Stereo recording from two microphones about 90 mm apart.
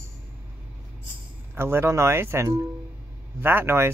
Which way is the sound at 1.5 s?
30° right (ahead or behind).